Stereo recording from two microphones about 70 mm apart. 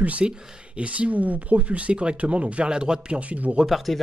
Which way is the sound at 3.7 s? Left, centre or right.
Centre.